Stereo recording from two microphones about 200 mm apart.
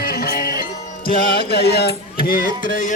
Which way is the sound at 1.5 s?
55° left (ahead or behind).